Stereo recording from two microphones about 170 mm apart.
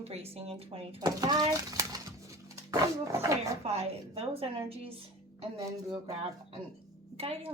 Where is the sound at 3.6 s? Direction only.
35° right (ahead or behind).